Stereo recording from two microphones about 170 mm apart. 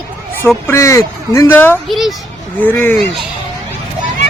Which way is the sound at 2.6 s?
10° left (ahead or behind).